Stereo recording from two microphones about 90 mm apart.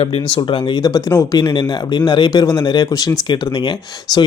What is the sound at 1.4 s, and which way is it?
Speech, 60° left (ahead or behind).